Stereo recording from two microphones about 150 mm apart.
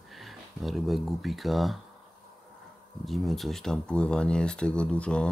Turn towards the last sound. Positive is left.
turn(degrees=5)  # may be behind; listen again after turning